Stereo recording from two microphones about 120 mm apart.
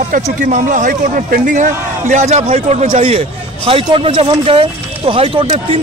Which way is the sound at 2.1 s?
65° right (ahead or behind).